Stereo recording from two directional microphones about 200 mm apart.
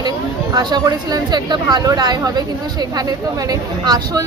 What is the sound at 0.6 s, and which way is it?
Speech, 20° right (ahead or behind).